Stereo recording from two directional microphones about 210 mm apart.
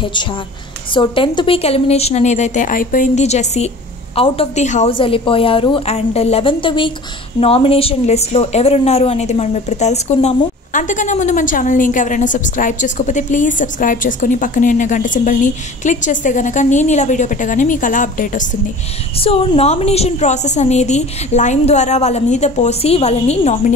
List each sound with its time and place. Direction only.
0.0 s a woman's voice: 20° left (ahead or behind); by 18.5 s 40° left (ahead or behind)
19.1 s a woman's voice: 25° left (ahead or behind)